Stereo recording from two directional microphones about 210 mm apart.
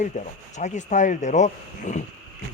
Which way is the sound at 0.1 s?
35° left (ahead or behind).